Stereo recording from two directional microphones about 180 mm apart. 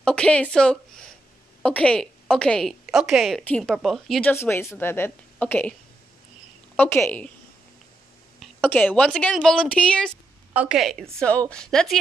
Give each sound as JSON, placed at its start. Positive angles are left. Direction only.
{"t": 0.0, "sound": "a woman's voice", "side_deg": 5}
{"t": 6.8, "sound": "a woman's voice", "side_deg": 10}
{"t": 8.4, "sound": "a woman's voice", "side_deg": 10}
{"t": 10.5, "sound": "a woman's voice", "side_deg": -5}